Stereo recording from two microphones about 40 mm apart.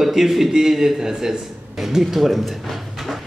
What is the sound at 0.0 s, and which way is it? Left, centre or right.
A man's voice, centre.